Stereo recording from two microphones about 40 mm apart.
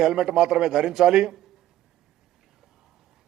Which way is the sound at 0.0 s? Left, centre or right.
Centre.